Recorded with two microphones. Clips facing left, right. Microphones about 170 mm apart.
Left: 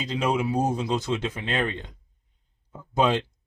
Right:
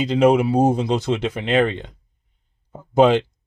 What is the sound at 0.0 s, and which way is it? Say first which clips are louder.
Speech: right 10 dB; 65° right (ahead or behind).